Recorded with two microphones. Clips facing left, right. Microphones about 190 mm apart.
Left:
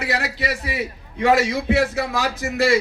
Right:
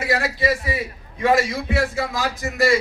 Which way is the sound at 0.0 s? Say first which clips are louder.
Right 3 dB; 70° left (ahead or behind).